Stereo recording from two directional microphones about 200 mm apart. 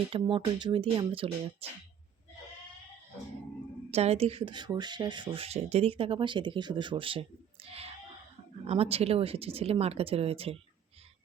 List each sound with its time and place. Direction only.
0.1 s speech: 25° right (ahead or behind)
3.9 s speech: 30° right (ahead or behind)